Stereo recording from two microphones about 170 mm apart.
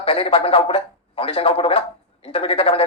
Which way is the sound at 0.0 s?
35° left (ahead or behind).